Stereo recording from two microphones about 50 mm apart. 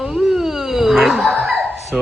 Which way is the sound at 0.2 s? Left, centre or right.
Centre.